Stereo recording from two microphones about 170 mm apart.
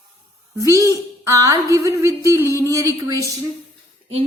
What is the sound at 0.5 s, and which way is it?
A woman's voice, 20° right (ahead or behind).